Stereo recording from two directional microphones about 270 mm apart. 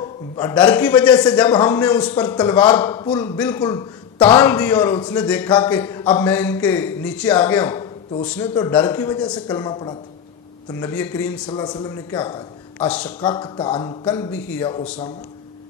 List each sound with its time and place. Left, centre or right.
0.4 s a man's voice: centre
4.4 s a man's voice: centre
11.5 s a man's voice: centre
13.3 s a man's voice: centre